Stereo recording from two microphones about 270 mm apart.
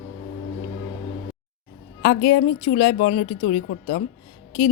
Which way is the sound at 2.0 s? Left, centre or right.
Left.